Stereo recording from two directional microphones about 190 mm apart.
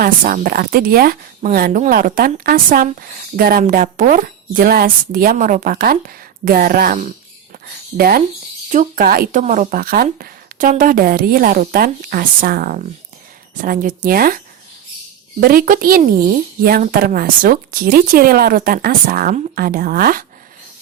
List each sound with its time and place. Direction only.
0.0 s speech: 50° right (ahead or behind)